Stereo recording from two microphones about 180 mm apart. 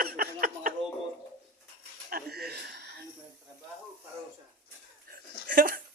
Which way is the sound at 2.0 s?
55° right (ahead or behind).